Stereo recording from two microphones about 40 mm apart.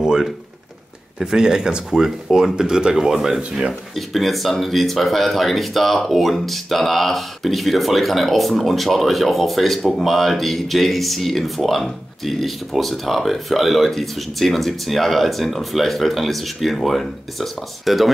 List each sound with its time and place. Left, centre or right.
0.0 s a sound: centre
1.2 s speech: centre
2.5 s speech: centre
3.9 s speech: centre